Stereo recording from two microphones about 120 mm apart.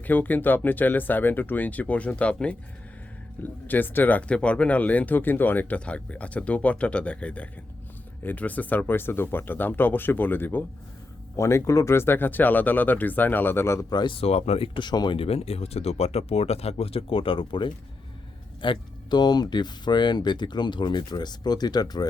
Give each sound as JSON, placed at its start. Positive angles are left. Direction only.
{"t": 0.0, "sound": "speech", "side_deg": 15}
{"t": 13.9, "sound": "speech", "side_deg": 40}